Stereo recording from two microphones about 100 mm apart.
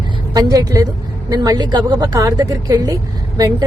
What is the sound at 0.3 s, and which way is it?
A woman's voice, 40° right (ahead or behind).